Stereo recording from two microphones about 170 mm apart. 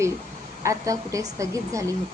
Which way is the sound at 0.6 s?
20° right (ahead or behind).